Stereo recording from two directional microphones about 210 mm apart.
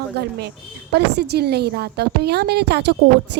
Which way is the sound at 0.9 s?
50° right (ahead or behind).